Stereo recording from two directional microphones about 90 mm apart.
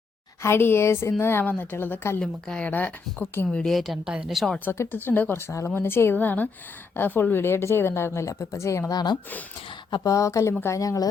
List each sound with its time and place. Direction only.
0.4 s a woman's voice: 25° left (ahead or behind)
2.2 s speech: 10° left (ahead or behind)
4.6 s a woman's voice: 25° left (ahead or behind)
8.9 s speech: 50° left (ahead or behind)
10.0 s speech: 40° left (ahead or behind)